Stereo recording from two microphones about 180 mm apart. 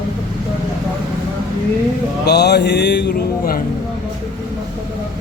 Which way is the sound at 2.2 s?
65° left (ahead or behind).